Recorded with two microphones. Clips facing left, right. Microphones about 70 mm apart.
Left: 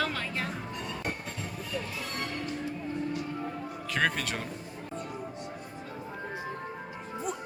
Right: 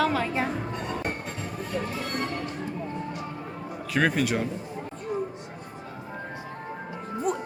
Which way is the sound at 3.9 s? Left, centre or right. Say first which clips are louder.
Right 6 dB; centre.